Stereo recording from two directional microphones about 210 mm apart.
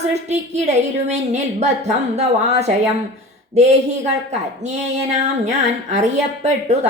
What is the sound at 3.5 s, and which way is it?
Speech, 30° right (ahead or behind).